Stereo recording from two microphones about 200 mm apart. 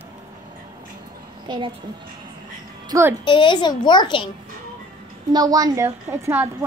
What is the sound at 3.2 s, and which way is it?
A child's voice, 25° left (ahead or behind).